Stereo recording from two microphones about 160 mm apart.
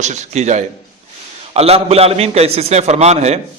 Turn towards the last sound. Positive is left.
turn(degrees=-45)  # may be behind; listen again after turning